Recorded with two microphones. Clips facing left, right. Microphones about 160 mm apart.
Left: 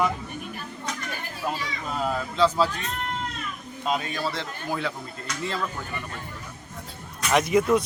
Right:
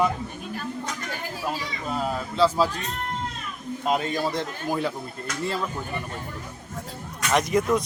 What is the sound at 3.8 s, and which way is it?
Speech, 45° right (ahead or behind).